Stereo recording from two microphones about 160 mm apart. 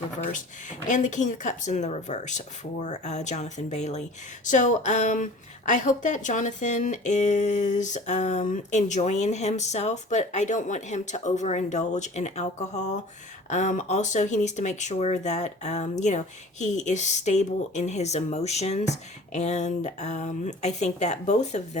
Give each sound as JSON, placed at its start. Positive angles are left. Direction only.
{"t": 0.3, "sound": "a woman's voice", "side_deg": 50}